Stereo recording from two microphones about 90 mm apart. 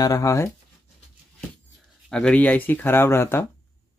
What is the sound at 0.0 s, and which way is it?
Speech, 40° left (ahead or behind).